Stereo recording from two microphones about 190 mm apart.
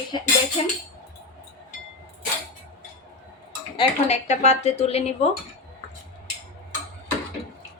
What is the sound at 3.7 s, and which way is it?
A woman's voice, 35° left (ahead or behind).